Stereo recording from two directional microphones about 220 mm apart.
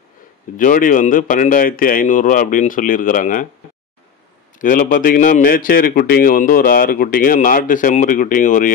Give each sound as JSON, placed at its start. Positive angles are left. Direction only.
{"t": 0.6, "sound": "a man's voice", "side_deg": 35}
{"t": 4.6, "sound": "a man's voice", "side_deg": 35}